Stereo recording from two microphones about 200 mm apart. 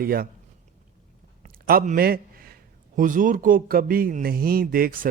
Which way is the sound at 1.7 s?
45° right (ahead or behind).